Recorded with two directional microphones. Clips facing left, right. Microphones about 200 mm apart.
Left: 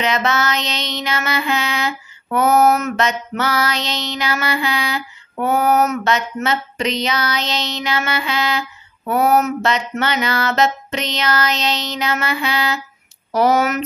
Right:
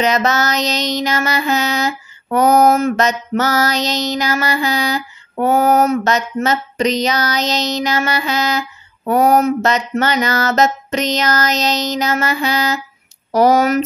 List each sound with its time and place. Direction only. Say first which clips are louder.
0.0 s mantra: right 3 dB; 40° right (ahead or behind)